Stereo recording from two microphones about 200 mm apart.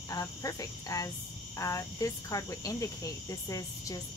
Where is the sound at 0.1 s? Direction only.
15° left (ahead or behind).